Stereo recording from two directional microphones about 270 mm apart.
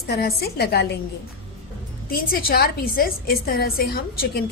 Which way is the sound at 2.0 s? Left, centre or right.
Left.